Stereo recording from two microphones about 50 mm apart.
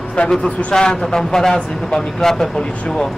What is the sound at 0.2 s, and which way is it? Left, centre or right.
Speech, left.